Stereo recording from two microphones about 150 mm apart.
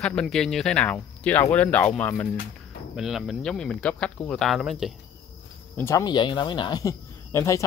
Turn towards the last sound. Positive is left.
turn(degrees=20)  # may be behind; listen again after turning